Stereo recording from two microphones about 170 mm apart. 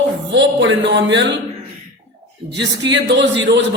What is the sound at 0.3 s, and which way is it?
A man's voice, 90° right.